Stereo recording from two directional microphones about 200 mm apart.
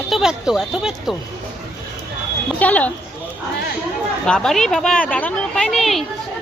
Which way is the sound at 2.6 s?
5° left (ahead or behind).